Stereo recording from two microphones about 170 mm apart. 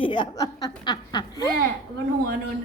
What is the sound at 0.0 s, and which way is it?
A woman's voice, 25° left (ahead or behind).